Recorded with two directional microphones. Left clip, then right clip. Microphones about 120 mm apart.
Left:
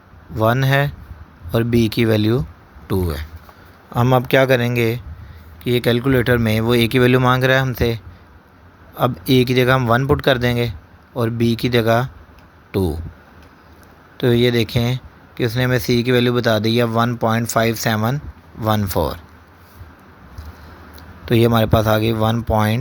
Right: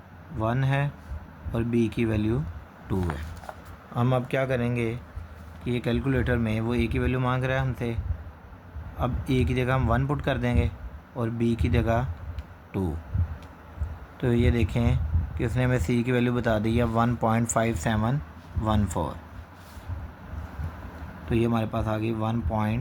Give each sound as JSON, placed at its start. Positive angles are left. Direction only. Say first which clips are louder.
{"t": 0.3, "sound": "a man's voice", "louder": "left 12 dB", "side_deg": 50}
{"t": 4.1, "sound": "a man's voice", "louder": "left 13 dB", "side_deg": 50}
{"t": 7.2, "sound": "a man's voice", "louder": "left 12 dB", "side_deg": 50}
{"t": 9.0, "sound": "a man's voice", "louder": "left 12 dB", "side_deg": 50}
{"t": 14.2, "sound": "a man's voice", "louder": "left 10 dB", "side_deg": 45}
{"t": 14.5, "sound": "a man's voice", "louder": "left 9 dB", "side_deg": 30}
{"t": 21.2, "sound": "speech", "louder": "left 11 dB", "side_deg": 60}